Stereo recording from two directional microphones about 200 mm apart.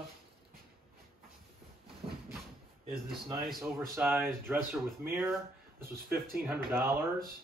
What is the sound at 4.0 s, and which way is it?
Speech, 10° right (ahead or behind).